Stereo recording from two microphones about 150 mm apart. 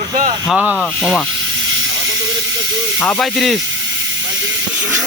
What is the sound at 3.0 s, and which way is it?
Speech, centre (ahead or behind).